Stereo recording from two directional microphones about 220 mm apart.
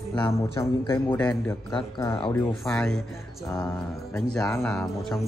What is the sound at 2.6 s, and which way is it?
Speech, 5° left (ahead or behind).